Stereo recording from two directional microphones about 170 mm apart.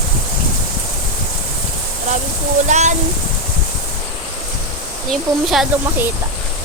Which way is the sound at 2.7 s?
45° right (ahead or behind).